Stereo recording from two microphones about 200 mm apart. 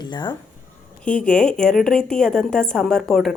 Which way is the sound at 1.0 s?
5° left (ahead or behind).